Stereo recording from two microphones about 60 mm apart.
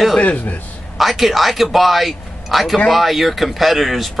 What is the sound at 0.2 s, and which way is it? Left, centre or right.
Speech, left.